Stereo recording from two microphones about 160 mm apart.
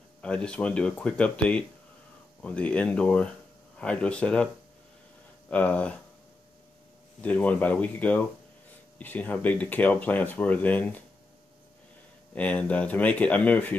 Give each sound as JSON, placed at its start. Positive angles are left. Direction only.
{"t": 0.2, "sound": "speech", "side_deg": 5}
{"t": 5.5, "sound": "speech", "side_deg": 10}
{"t": 7.2, "sound": "speech", "side_deg": 10}
{"t": 12.4, "sound": "speech", "side_deg": 5}